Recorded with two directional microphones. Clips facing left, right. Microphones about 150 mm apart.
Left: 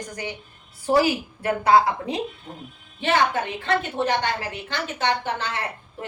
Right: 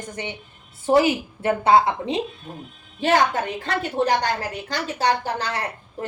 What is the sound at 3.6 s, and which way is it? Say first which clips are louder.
A woman's voice: even; 40° right (ahead or behind).